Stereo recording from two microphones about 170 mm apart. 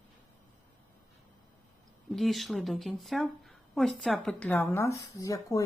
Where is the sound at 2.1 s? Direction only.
Centre (ahead or behind).